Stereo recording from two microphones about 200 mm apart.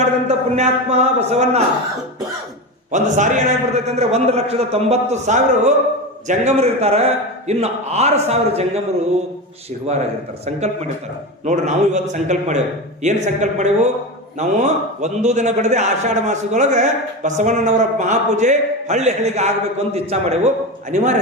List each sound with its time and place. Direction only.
0.3 s a man's voice: 30° right (ahead or behind)
2.9 s a man's voice: 35° right (ahead or behind)
10.4 s a man's voice: 35° right (ahead or behind)